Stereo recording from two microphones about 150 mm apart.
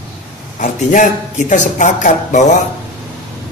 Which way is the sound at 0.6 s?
60° left (ahead or behind).